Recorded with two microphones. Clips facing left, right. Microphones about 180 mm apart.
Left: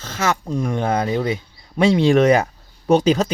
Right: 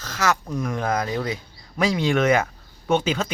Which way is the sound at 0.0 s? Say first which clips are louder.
Left 2 dB; 25° left (ahead or behind).